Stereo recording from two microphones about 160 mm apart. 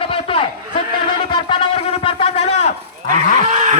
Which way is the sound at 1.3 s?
30° left (ahead or behind).